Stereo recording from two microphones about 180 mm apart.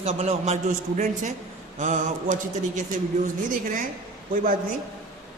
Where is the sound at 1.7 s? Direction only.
45° right (ahead or behind).